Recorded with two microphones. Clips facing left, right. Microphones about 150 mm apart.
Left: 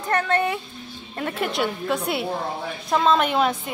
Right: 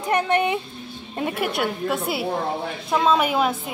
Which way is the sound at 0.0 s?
15° right (ahead or behind).